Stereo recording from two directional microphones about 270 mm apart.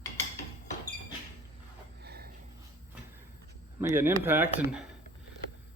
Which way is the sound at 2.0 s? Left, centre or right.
Right.